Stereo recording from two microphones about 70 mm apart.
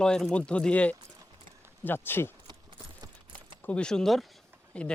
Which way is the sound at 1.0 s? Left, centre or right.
Right.